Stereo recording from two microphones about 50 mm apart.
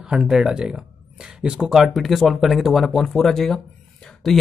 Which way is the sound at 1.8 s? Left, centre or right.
Centre.